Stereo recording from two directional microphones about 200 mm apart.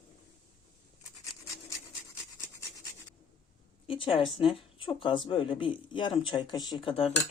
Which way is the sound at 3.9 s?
25° left (ahead or behind).